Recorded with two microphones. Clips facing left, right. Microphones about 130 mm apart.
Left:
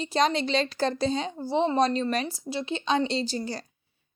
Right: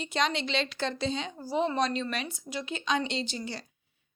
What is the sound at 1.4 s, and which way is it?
Speech, 25° left (ahead or behind).